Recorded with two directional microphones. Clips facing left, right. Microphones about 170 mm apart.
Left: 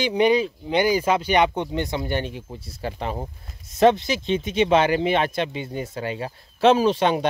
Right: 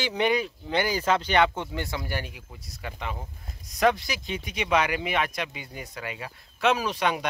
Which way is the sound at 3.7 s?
25° left (ahead or behind).